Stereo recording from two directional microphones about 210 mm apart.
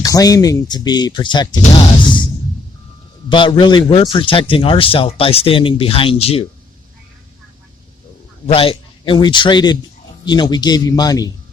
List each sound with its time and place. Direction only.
0.0 s a man's voice: 15° left (ahead or behind)
3.2 s a man's voice: 25° left (ahead or behind)
8.4 s a man's voice: 25° left (ahead or behind)